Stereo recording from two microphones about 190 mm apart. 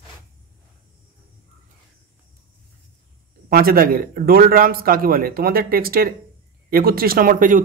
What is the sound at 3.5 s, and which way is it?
A man's voice, 50° right (ahead or behind).